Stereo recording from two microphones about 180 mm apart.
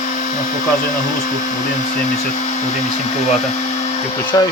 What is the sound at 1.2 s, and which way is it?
Speech, 45° left (ahead or behind).